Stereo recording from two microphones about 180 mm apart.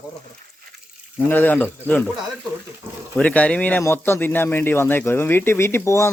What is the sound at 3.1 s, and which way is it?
Speech, 5° left (ahead or behind).